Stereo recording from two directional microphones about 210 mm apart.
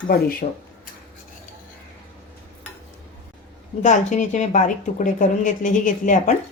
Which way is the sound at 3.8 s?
35° left (ahead or behind).